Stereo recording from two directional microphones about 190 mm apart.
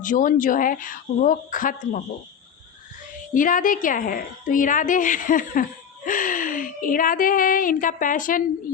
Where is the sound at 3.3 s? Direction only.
45° left (ahead or behind).